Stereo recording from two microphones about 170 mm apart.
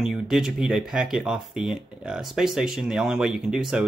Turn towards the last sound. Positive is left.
turn(degrees=-5)  # may be behind; listen again after turning